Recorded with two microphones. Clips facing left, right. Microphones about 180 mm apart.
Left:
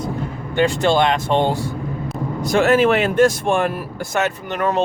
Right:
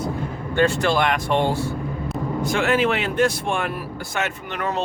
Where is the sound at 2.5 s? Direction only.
40° left (ahead or behind).